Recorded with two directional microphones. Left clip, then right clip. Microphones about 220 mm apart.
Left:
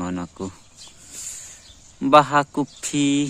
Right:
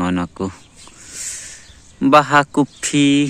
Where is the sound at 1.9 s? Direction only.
5° right (ahead or behind).